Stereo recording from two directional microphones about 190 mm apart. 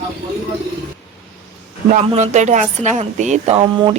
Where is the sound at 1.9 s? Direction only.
40° right (ahead or behind).